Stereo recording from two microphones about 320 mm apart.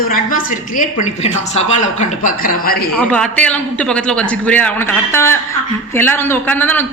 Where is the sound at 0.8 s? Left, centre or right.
Left.